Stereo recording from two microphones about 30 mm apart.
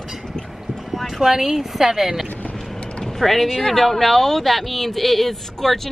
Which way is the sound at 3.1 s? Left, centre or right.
Centre.